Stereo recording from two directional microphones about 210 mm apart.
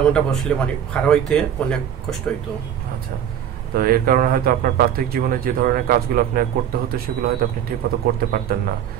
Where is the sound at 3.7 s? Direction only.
45° right (ahead or behind).